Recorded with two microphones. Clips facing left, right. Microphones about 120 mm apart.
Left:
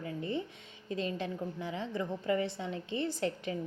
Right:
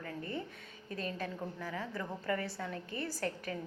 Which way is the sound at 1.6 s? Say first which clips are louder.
Left 5 dB; 20° left (ahead or behind).